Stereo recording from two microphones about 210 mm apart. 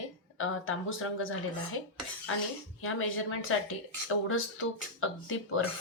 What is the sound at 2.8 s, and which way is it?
Speech, 75° left (ahead or behind).